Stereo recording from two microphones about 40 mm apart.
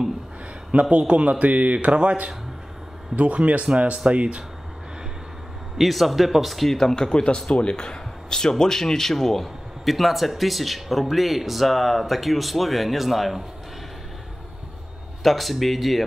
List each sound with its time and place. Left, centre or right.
0.7 s speech: right
5.8 s a man's voice: centre
6.8 s a man's voice: centre
15.2 s a man's voice: centre